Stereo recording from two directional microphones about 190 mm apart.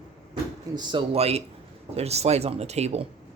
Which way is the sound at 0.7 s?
25° right (ahead or behind).